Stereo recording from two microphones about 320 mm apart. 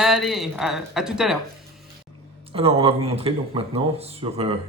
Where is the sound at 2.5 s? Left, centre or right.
Centre.